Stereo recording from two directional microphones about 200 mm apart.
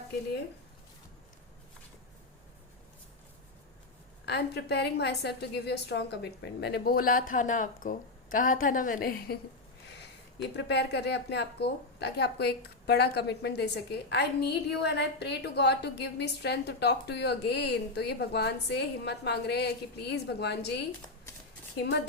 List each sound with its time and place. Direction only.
4.3 s a woman's voice: 55° left (ahead or behind)
10.6 s a woman's voice: 60° left (ahead or behind)